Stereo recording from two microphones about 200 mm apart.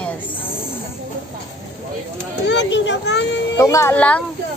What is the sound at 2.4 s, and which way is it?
Speech, 60° left (ahead or behind).